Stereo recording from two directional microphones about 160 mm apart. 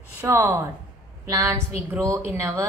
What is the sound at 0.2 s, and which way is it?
A woman's voice, 15° right (ahead or behind).